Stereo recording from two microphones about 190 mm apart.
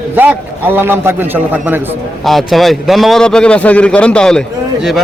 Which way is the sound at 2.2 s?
Centre (ahead or behind).